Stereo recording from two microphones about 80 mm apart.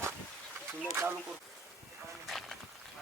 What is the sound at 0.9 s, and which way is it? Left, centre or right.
Speech, right.